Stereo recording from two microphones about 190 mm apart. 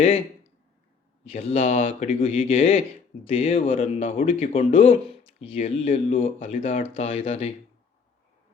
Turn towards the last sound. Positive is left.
turn(degrees=30)  # may be behind; listen again after turning